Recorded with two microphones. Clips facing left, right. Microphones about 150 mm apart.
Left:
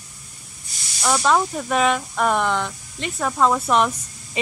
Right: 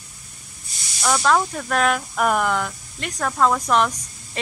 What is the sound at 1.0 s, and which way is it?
Speech, 5° left (ahead or behind).